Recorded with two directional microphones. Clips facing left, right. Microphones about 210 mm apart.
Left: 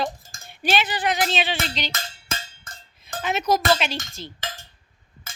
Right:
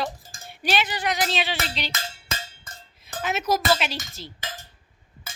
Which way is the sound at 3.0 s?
5° right (ahead or behind).